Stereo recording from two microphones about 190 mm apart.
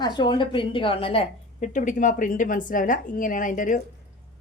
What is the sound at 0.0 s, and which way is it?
Speech, 25° left (ahead or behind).